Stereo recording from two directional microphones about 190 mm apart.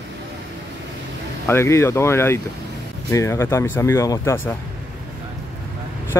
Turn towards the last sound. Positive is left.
turn(degrees=15)  # may be behind; listen again after turning